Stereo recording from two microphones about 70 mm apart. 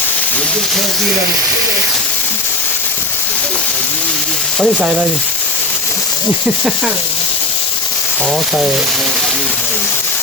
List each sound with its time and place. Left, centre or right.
4.6 s speech: centre